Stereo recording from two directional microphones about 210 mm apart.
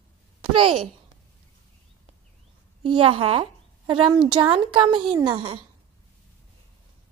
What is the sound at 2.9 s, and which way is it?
A woman's voice, 25° right (ahead or behind).